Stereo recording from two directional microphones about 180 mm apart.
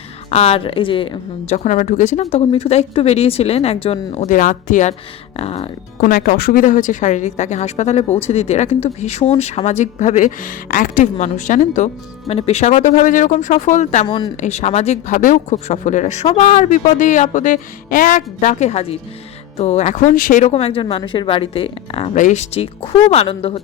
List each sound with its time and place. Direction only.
0.3 s speech: 35° left (ahead or behind)
2.3 s speech: 30° left (ahead or behind)
4.3 s speech: 45° left (ahead or behind)
6.0 s speech: 50° left (ahead or behind); by 23.6 s 30° left (ahead or behind)